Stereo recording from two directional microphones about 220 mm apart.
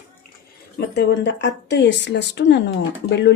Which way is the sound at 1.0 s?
50° left (ahead or behind).